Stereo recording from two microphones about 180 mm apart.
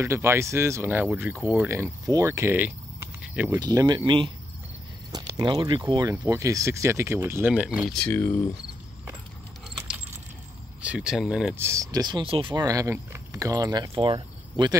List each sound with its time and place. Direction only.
0.0 s speech: 15° right (ahead or behind)
7.9 s speech: 10° left (ahead or behind)
10.8 s speech: 5° right (ahead or behind); by 14.8 s 25° right (ahead or behind)